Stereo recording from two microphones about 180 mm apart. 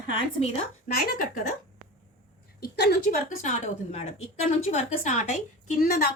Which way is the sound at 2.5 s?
65° left (ahead or behind).